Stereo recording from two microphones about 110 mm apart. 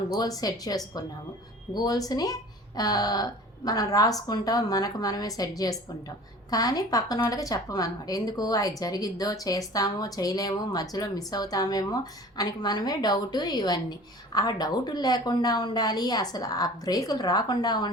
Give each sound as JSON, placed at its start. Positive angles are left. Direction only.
{"t": 0.1, "sound": "a woman's voice", "side_deg": 35}